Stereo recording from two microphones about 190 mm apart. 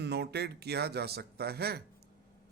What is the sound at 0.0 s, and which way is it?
A man's voice, 60° right (ahead or behind).